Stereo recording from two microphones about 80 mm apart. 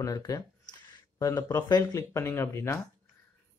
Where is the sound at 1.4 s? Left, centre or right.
Left.